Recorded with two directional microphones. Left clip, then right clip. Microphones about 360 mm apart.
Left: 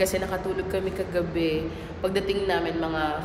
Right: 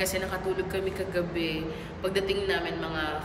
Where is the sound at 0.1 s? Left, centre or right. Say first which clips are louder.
Left 2 dB; centre.